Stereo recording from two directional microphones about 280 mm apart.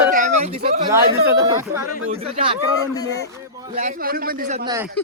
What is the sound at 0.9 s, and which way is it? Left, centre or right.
Speech, centre.